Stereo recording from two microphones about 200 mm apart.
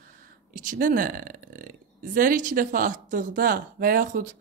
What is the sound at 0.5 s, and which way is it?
Speech, 40° right (ahead or behind).